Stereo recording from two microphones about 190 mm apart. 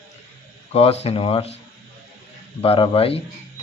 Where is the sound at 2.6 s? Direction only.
30° left (ahead or behind).